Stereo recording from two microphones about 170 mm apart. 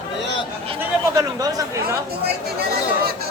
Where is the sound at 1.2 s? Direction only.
20° right (ahead or behind).